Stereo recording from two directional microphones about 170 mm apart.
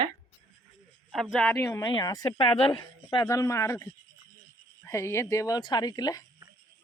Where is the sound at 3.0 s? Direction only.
20° left (ahead or behind).